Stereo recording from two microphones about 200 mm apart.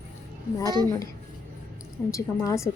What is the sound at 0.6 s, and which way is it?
Speech, 20° right (ahead or behind).